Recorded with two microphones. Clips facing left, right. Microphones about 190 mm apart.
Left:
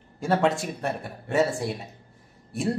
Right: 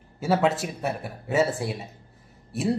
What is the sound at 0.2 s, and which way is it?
Speech, 5° right (ahead or behind).